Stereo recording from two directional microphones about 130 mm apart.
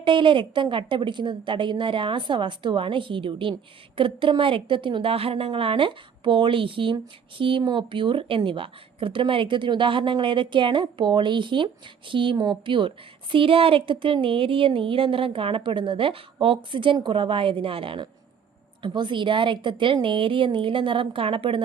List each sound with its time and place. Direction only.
0.0 s a woman's voice: 40° right (ahead or behind)